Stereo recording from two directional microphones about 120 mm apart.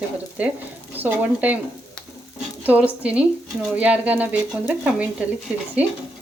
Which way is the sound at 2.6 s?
15° right (ahead or behind).